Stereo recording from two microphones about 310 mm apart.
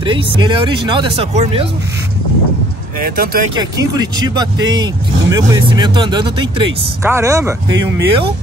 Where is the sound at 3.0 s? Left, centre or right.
Right.